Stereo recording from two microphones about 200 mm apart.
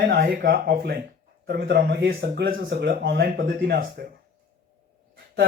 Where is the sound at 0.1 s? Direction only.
50° right (ahead or behind).